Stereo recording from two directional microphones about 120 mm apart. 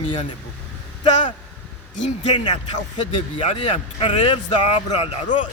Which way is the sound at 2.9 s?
45° left (ahead or behind).